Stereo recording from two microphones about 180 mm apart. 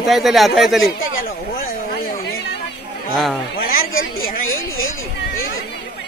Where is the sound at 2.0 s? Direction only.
55° left (ahead or behind).